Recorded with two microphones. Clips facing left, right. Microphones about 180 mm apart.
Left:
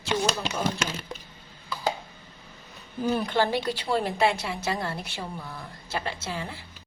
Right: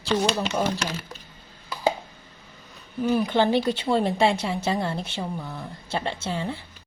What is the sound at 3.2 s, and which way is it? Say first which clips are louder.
A woman's voice: right 4 dB; 20° right (ahead or behind).